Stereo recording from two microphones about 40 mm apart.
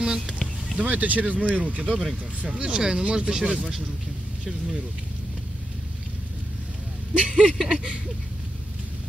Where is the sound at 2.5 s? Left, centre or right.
Right.